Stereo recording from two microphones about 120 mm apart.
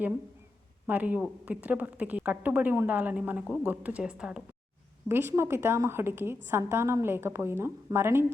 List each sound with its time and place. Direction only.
0.9 s a woman's voice: 15° right (ahead or behind)
5.0 s a woman's voice: 20° right (ahead or behind)